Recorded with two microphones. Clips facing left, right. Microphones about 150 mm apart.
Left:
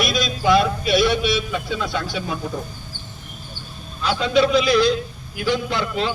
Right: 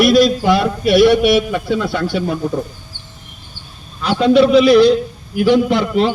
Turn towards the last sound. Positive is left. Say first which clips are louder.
# right 9 dB
turn(degrees=-65)  # may be behind; listen again after turning